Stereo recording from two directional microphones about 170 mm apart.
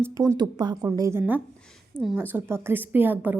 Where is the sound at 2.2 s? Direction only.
10° right (ahead or behind).